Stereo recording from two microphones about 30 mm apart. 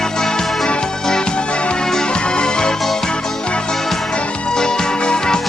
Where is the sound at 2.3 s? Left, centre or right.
Left.